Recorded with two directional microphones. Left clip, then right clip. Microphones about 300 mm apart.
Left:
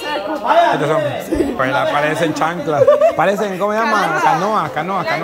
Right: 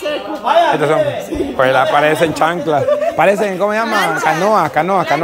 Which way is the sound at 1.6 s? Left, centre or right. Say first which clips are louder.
Right 7 dB; centre.